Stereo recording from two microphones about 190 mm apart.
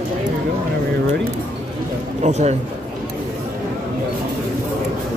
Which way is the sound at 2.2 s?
35° right (ahead or behind).